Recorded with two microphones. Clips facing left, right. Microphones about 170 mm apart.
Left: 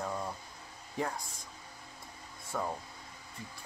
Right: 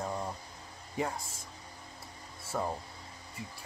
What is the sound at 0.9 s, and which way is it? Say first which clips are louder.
Speech: right 1 dB; 5° right (ahead or behind).